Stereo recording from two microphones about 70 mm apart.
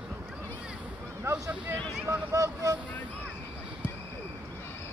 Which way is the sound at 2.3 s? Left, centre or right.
Right.